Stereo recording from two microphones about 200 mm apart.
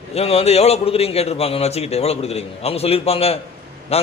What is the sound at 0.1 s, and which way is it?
A man's voice, 30° left (ahead or behind).